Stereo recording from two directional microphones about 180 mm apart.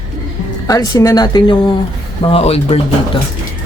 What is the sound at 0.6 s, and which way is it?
Speech, 20° left (ahead or behind).